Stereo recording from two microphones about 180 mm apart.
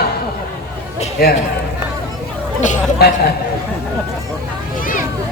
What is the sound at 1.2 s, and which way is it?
Speech, 60° left (ahead or behind).